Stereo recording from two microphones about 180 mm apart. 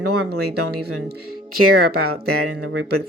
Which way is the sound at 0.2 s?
65° right (ahead or behind).